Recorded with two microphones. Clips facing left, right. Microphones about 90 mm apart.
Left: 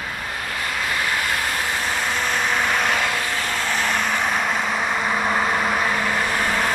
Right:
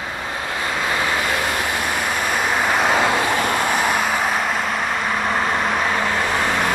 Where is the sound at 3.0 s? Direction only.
25° right (ahead or behind).